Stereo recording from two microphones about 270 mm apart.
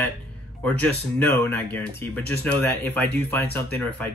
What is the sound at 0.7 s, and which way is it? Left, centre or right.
Speech, centre.